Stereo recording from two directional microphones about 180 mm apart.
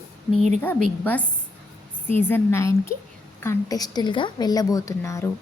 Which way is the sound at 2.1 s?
10° left (ahead or behind).